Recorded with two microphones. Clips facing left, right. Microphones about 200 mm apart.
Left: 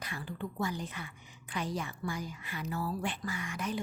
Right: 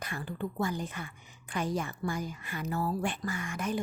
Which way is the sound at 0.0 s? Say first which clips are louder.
Right 3 dB; 50° right (ahead or behind).